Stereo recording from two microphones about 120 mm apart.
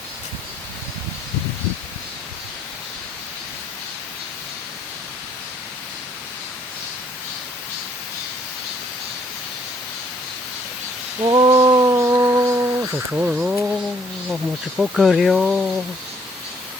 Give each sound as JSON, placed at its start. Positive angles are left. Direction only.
{"t": 11.2, "sound": "a sound", "side_deg": -40}
{"t": 13.1, "sound": "speech", "side_deg": -15}
{"t": 14.8, "sound": "speech", "side_deg": 0}